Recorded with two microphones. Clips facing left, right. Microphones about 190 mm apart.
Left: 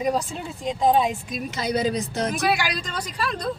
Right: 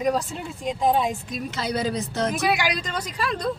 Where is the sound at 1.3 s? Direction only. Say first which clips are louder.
Left 2 dB; 15° left (ahead or behind).